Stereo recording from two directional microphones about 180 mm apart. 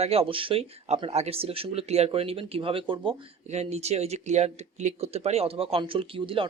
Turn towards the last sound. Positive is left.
turn(degrees=-30)  # may be behind; listen again after turning